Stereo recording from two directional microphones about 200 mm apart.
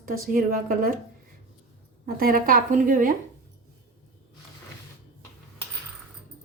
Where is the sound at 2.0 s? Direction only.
45° right (ahead or behind).